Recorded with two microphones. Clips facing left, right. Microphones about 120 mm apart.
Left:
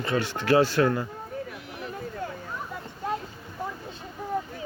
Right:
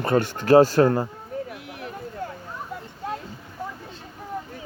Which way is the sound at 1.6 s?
60° right (ahead or behind).